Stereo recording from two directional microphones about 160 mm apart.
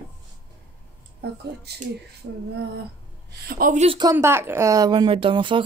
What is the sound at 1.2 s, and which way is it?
Speech, 90° right.